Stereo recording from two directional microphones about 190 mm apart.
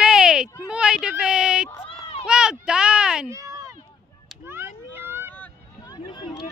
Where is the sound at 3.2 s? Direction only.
15° right (ahead or behind).